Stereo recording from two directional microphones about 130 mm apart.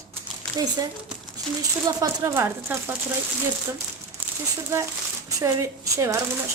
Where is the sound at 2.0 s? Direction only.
25° right (ahead or behind).